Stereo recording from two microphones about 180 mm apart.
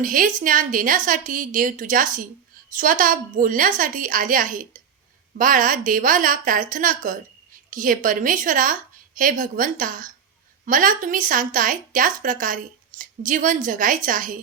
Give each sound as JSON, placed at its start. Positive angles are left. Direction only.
{"t": 0.0, "sound": "a woman's voice", "side_deg": -50}